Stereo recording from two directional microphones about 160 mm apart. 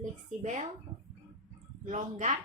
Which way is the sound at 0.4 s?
50° right (ahead or behind).